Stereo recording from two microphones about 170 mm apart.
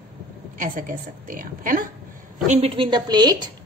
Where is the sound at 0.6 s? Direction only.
55° right (ahead or behind).